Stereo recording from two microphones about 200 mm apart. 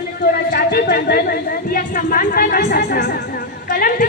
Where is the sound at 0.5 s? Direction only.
50° left (ahead or behind).